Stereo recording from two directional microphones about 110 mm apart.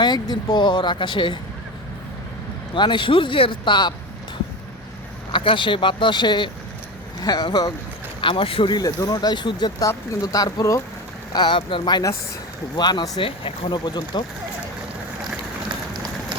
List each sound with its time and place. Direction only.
0.0 s speech: 40° left (ahead or behind)
2.7 s speech: 45° left (ahead or behind)
5.3 s speech: 50° left (ahead or behind)
8.2 s speech: 55° left (ahead or behind)
10.3 s speech: 30° left (ahead or behind)
11.3 s speech: 45° left (ahead or behind)